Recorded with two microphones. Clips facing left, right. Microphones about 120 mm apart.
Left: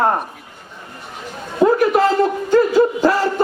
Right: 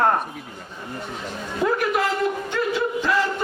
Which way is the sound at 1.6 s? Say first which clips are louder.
Left 8 dB; 35° left (ahead or behind).